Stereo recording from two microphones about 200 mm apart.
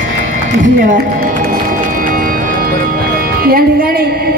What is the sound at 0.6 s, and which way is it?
Speech, 45° right (ahead or behind).